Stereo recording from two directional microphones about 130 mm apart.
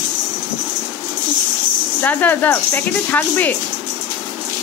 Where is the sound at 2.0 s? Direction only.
15° left (ahead or behind).